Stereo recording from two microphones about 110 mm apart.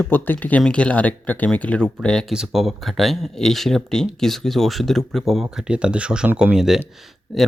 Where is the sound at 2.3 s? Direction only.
5° right (ahead or behind).